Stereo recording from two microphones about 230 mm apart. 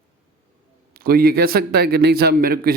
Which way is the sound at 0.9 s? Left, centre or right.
Right.